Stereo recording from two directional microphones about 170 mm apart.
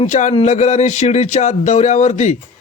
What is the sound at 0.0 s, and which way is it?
Speech, 45° left (ahead or behind).